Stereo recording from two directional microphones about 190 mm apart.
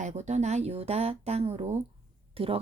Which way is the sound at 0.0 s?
35° right (ahead or behind).